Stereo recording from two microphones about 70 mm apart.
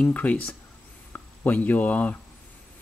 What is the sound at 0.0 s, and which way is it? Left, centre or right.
Speech, left.